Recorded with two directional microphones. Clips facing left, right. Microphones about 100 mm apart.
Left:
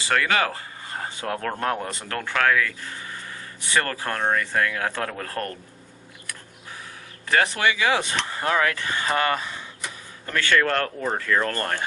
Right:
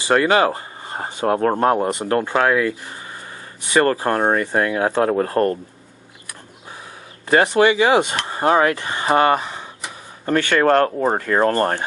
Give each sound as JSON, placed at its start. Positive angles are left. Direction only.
{"t": 0.1, "sound": "speech", "side_deg": -30}
{"t": 6.2, "sound": "vehicle", "side_deg": -20}
{"t": 7.3, "sound": "speech", "side_deg": -20}